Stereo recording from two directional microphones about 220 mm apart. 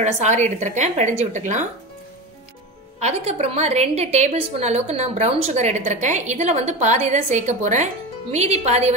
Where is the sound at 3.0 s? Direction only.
30° right (ahead or behind).